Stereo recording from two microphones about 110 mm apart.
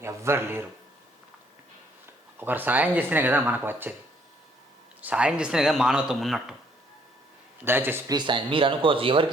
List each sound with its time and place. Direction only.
0.0 s a sound: 25° right (ahead or behind)
2.4 s speech: 15° right (ahead or behind)
4.9 s speech: 10° right (ahead or behind)
7.6 s a man's voice: 20° right (ahead or behind)
8.0 s speech: 45° right (ahead or behind)